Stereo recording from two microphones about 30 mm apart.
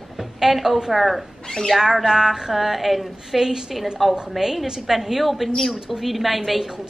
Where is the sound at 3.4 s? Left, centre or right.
Centre.